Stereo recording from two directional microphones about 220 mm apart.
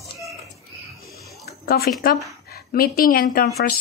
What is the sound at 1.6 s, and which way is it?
A woman's voice, 45° left (ahead or behind).